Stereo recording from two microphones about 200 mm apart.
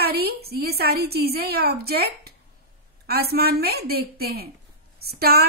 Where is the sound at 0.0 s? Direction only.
50° right (ahead or behind).